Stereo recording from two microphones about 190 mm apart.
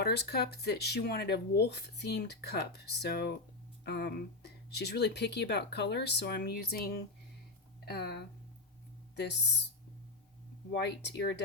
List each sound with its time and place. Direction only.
0.0 s speech: 60° left (ahead or behind)
10.7 s speech: 65° left (ahead or behind)